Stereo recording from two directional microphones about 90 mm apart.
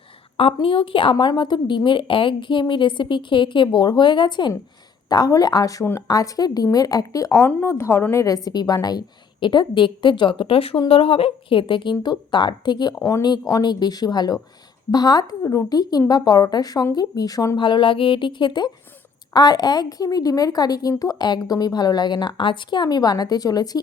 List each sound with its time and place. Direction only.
0.3 s a woman's voice: 90° left; by 1.1 s 70° left (ahead or behind)
1.2 s a woman's voice: 55° left (ahead or behind)
5.0 s a woman's voice: 45° left (ahead or behind)
7.3 s a woman's voice: 25° left (ahead or behind)
17.6 s a woman's voice: 65° left (ahead or behind); by 23.8 s 45° left (ahead or behind)